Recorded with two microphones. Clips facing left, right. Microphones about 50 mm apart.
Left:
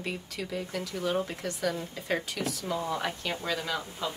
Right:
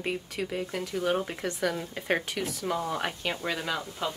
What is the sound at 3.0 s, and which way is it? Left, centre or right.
Speech, right.